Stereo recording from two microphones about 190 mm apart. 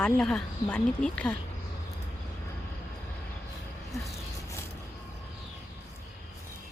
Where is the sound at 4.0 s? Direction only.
15° left (ahead or behind).